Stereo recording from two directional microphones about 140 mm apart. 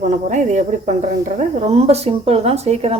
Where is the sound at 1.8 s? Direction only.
45° right (ahead or behind).